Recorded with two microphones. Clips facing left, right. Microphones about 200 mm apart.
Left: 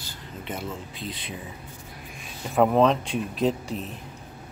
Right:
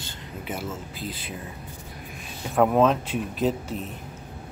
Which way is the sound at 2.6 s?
Centre (ahead or behind).